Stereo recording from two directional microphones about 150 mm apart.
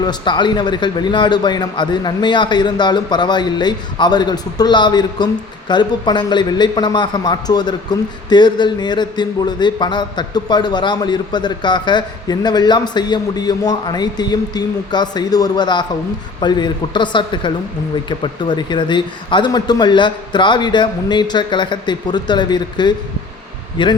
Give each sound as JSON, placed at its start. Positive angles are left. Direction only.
{"t": 0.0, "sound": "a man's voice", "side_deg": 30}